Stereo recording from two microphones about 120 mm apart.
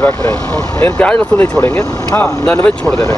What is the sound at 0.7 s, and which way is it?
Speech, 20° left (ahead or behind).